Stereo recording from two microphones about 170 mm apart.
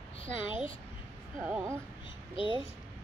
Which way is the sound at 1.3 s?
15° right (ahead or behind).